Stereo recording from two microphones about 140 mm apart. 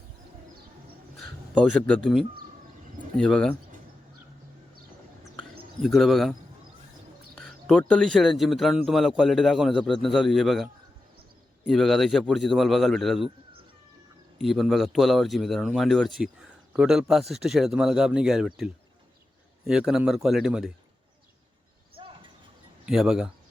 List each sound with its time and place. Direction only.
1.1 s a sound: 5° left (ahead or behind)
3.2 s speech: 5° left (ahead or behind)
5.8 s speech: centre (ahead or behind)
7.3 s speech: 5° left (ahead or behind)
14.3 s speech: centre (ahead or behind)
22.0 s a sound: 35° right (ahead or behind)
22.9 s speech: 5° right (ahead or behind)